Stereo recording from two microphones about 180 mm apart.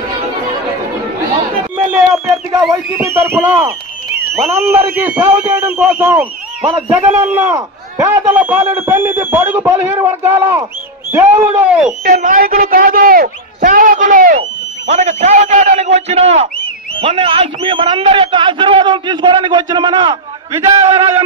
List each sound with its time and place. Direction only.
1.9 s a sound: centre (ahead or behind)
2.7 s a man's voice: 15° right (ahead or behind)
12.0 s speech: 50° right (ahead or behind)
14.9 s a man's voice: 40° right (ahead or behind)